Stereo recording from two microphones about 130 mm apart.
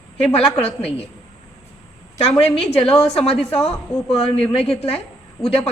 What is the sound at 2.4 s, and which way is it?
A woman's voice, 50° left (ahead or behind).